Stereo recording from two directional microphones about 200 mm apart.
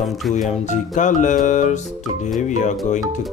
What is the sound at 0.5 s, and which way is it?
Music, 35° left (ahead or behind).